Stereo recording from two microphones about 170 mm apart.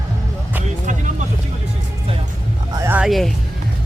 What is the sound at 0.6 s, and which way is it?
Vehicle, 50° right (ahead or behind).